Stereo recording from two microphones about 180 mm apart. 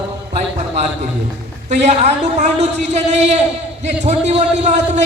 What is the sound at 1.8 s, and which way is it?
A man's voice, 40° right (ahead or behind).